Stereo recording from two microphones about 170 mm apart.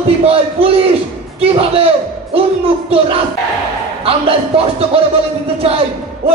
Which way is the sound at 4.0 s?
35° right (ahead or behind).